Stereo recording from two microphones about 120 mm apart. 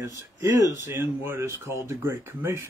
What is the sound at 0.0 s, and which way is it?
Speech, 25° right (ahead or behind).